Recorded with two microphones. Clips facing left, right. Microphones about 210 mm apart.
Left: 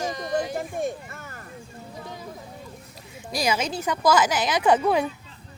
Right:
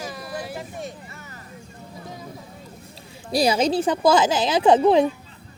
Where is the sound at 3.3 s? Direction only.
35° right (ahead or behind).